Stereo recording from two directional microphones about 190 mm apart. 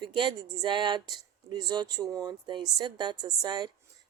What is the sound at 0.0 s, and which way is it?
Speech, 25° right (ahead or behind).